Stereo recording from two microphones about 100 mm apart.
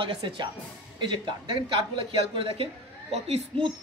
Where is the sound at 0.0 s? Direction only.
50° right (ahead or behind); by 3.4 s 90° right.